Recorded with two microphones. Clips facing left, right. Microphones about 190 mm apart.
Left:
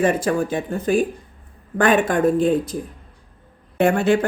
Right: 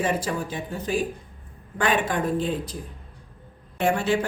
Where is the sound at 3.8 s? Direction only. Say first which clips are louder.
Left 6 dB; 55° left (ahead or behind).